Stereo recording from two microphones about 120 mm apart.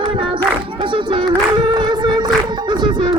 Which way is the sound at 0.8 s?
45° right (ahead or behind).